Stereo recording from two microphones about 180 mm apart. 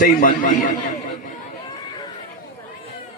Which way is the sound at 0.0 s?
50° left (ahead or behind).